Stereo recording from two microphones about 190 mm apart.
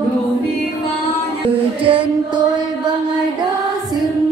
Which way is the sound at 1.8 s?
25° right (ahead or behind).